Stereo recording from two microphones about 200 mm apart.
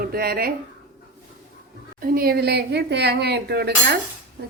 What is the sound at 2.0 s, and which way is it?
Speech, 45° right (ahead or behind).